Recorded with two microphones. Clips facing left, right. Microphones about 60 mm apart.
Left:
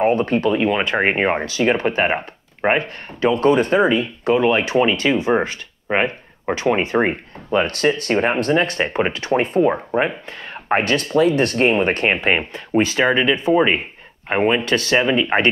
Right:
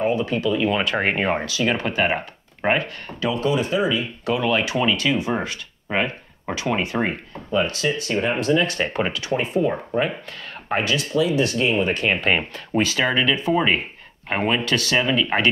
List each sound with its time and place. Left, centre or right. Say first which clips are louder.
0.0 s speech: left 5 dB; left
0.7 s speech: left 3 dB; left
4.2 s speech: left 5 dB; left
7.5 s speech: left 4 dB; left
10.8 s speech: left 4 dB; left
12.2 s speech: left 2 dB; left